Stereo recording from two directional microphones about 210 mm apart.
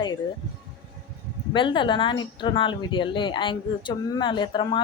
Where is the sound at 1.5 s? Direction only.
25° left (ahead or behind).